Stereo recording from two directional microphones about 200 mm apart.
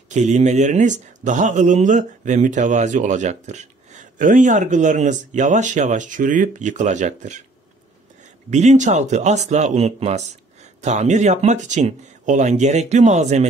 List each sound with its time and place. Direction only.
0.1 s speech: 35° right (ahead or behind)
8.5 s speech: 35° right (ahead or behind)